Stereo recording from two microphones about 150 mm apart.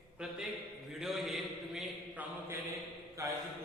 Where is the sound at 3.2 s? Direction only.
20° right (ahead or behind).